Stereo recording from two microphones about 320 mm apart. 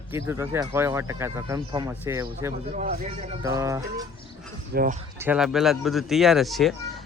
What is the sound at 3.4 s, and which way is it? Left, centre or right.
Speech, centre.